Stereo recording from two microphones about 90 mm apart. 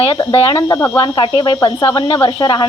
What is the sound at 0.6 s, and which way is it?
Speech, 45° left (ahead or behind).